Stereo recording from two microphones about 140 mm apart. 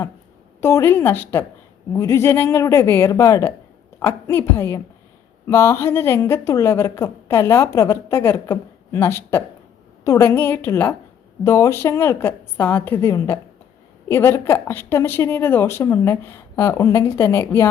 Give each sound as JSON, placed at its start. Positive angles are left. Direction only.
{"t": 0.6, "sound": "a woman's voice", "side_deg": 20}